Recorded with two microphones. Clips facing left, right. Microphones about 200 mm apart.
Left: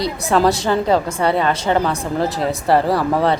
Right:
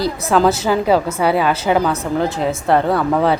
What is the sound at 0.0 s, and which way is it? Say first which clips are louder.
Speech: right 1 dB; centre (ahead or behind).